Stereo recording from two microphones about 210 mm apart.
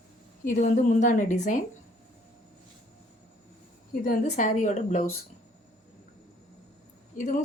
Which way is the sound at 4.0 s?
35° left (ahead or behind).